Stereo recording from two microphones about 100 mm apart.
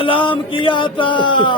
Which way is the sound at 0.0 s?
55° left (ahead or behind).